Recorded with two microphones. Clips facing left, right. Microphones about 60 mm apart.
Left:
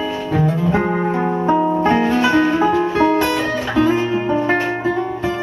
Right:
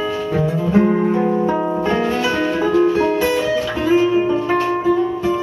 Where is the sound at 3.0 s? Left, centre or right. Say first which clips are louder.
Left 2 dB; left.